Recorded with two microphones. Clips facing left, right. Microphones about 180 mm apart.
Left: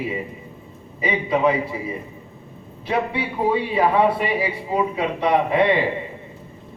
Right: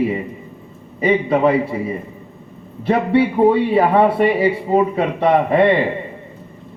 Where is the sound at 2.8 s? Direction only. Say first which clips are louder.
Right 8 dB; 55° right (ahead or behind).